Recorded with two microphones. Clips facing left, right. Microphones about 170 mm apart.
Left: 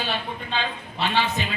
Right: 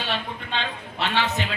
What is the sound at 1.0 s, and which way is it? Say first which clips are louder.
Speech: left 1 dB; 75° right (ahead or behind).